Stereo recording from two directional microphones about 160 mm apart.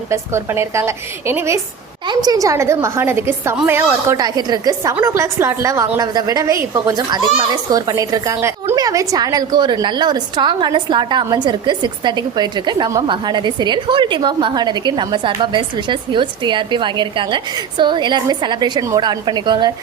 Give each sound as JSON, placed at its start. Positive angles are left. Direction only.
{"t": 0.1, "sound": "a woman's voice", "side_deg": -15}